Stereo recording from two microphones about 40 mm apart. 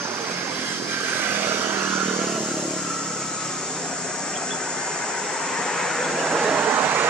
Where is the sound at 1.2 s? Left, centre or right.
Right.